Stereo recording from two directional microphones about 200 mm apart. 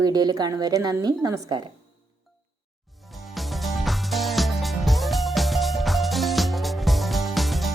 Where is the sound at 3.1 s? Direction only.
Centre (ahead or behind).